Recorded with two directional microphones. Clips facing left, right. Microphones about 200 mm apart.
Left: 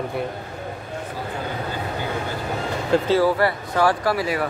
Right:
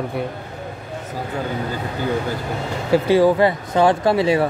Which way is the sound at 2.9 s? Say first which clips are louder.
Right 4 dB; 15° right (ahead or behind).